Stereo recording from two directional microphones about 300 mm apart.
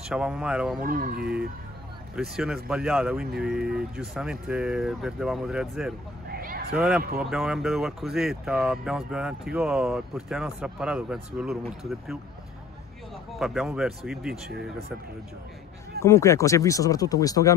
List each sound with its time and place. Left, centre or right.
0.1 s speech: centre
0.7 s speech: right
2.1 s speech: centre
6.2 s a sound: right
6.7 s speech: centre
13.3 s speech: centre
16.0 s speech: centre